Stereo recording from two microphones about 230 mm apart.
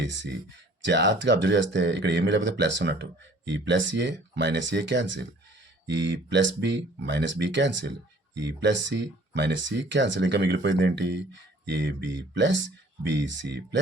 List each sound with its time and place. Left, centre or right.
0.0 s speech: right